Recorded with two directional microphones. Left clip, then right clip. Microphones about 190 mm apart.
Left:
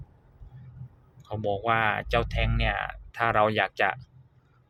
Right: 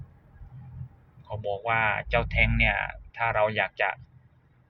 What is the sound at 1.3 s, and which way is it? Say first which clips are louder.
Speech: left 2 dB; 25° left (ahead or behind).